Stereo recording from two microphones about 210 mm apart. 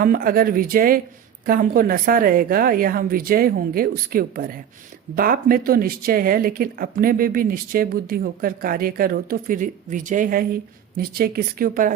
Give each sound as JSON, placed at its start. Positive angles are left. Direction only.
{"t": 0.0, "sound": "speech", "side_deg": -45}